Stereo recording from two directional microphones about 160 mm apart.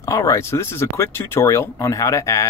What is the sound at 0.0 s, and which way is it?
Speech, 20° left (ahead or behind).